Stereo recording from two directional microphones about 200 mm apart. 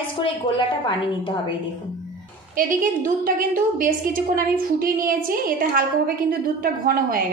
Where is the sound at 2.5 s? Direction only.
45° right (ahead or behind).